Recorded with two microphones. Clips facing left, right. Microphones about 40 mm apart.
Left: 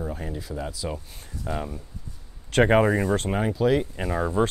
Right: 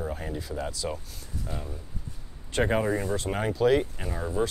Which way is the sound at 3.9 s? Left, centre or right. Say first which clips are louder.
Left 5 dB; left.